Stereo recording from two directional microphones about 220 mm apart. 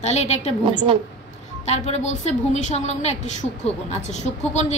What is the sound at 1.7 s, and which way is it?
A woman's voice, 30° left (ahead or behind).